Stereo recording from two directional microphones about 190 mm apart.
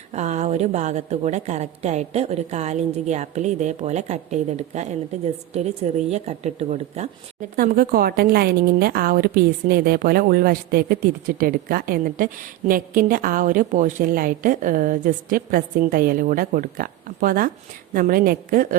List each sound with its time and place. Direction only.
0.1 s a woman's voice: 35° right (ahead or behind)
7.5 s a woman's voice: 50° right (ahead or behind)